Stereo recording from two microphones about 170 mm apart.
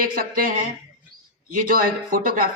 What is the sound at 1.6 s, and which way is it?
Speech, 55° right (ahead or behind).